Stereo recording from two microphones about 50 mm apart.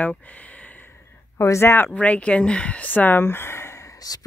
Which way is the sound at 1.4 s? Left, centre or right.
Left.